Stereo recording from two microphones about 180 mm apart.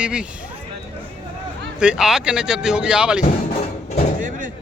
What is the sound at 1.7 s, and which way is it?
A man's voice, 5° right (ahead or behind).